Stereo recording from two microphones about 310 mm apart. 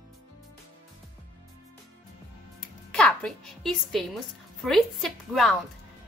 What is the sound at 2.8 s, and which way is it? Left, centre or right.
A woman's voice, centre.